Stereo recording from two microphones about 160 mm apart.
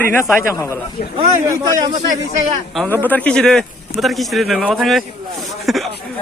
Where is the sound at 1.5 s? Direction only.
20° right (ahead or behind).